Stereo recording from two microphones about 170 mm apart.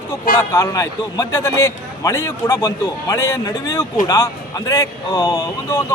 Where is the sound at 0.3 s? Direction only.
15° left (ahead or behind).